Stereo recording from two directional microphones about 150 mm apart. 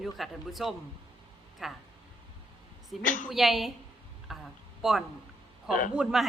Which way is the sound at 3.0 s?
60° left (ahead or behind).